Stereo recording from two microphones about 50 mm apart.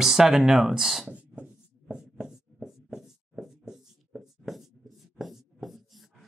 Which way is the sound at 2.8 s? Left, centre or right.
Centre.